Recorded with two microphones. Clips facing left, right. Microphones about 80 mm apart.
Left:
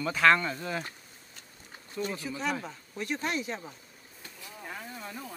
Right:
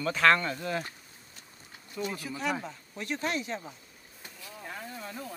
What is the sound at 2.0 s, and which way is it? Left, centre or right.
Speech, centre.